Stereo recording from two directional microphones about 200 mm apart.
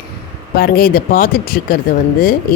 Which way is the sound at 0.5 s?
50° left (ahead or behind).